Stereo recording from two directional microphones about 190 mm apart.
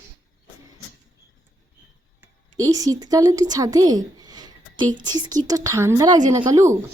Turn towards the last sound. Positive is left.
turn(degrees=-15)  # may be behind; listen again after turning